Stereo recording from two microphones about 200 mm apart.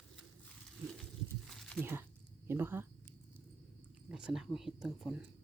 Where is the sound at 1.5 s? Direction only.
Centre (ahead or behind).